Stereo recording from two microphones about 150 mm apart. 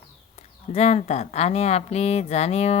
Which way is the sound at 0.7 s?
45° left (ahead or behind).